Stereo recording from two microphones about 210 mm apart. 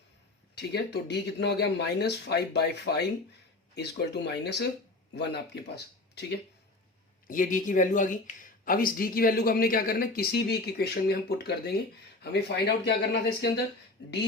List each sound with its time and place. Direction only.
0.5 s speech: 55° left (ahead or behind)
7.3 s speech: 40° left (ahead or behind)